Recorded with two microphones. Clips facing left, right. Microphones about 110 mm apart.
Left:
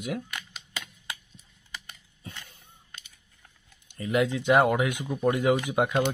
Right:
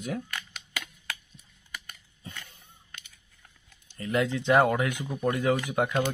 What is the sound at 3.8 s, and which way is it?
Speech, 10° left (ahead or behind).